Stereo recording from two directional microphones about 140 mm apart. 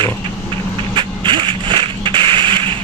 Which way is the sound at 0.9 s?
35° right (ahead or behind).